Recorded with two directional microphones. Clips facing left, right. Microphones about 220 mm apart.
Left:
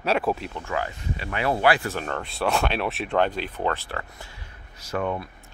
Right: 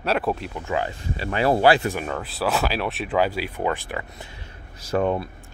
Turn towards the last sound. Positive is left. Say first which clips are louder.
# right 5 dB
turn(degrees=-30)  # may be behind; listen again after turning